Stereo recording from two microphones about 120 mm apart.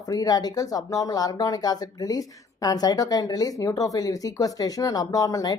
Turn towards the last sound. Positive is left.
turn(degrees=30)  # may be behind; listen again after turning